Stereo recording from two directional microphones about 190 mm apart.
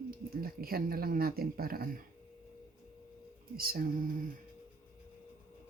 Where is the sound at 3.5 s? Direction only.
50° right (ahead or behind).